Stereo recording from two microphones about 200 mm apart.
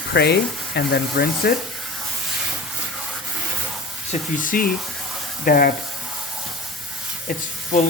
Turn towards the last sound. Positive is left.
turn(degrees=40)  # may be behind; listen again after turning